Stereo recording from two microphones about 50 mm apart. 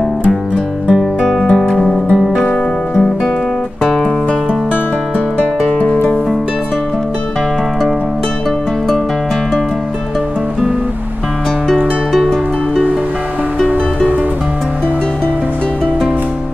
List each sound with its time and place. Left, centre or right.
0.8 s music: centre
5.8 s music: left